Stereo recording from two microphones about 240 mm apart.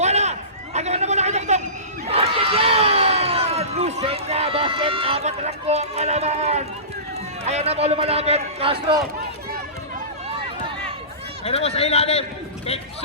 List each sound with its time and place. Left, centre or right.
0.0 s a sound: right
2.0 s crowd: right
7.4 s a man's voice: right
11.4 s a man's voice: left